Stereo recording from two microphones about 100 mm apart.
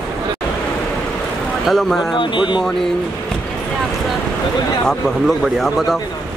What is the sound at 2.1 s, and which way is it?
Speech, 50° left (ahead or behind).